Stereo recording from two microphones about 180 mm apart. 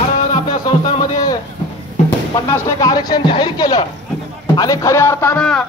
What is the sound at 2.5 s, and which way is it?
Speech, 20° left (ahead or behind).